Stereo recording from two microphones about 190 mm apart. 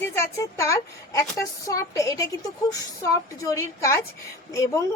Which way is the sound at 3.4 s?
15° left (ahead or behind).